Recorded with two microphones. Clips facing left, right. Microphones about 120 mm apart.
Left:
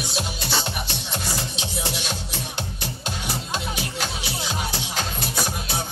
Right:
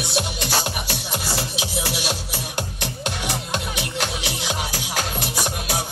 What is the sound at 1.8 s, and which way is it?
Music, 90° right.